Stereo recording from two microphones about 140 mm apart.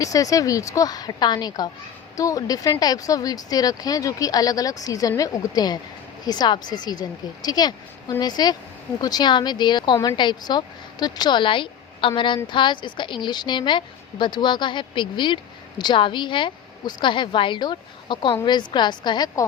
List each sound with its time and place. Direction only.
0.0 s a woman's voice: 25° left (ahead or behind)